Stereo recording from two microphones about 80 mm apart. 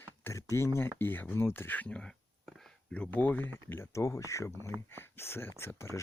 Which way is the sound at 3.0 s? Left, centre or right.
Left.